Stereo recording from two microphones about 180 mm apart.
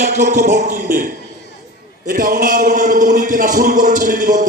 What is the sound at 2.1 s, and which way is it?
A man's voice, 50° right (ahead or behind).